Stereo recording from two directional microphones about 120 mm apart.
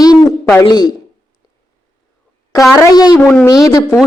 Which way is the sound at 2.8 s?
35° left (ahead or behind).